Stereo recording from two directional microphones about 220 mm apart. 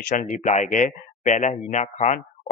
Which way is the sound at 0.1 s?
35° left (ahead or behind).